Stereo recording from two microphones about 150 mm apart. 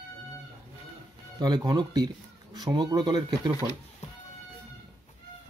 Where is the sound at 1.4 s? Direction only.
25° right (ahead or behind).